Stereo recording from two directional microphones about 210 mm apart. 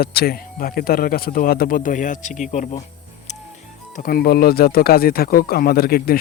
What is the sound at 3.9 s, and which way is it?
Speech, 45° left (ahead or behind).